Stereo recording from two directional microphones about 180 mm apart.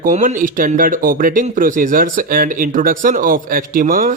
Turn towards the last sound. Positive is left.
turn(degrees=-50)  # may be behind; listen again after turning